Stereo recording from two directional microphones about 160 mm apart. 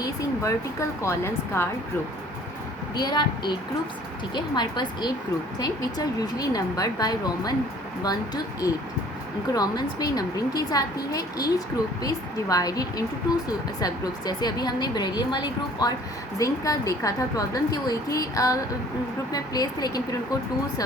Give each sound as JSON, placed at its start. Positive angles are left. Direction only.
{"t": 0.0, "sound": "a woman's voice", "side_deg": 20}
{"t": 2.9, "sound": "a woman's voice", "side_deg": 25}
{"t": 9.6, "sound": "a woman's voice", "side_deg": 25}